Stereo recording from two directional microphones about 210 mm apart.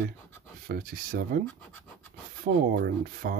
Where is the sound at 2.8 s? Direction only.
45° right (ahead or behind).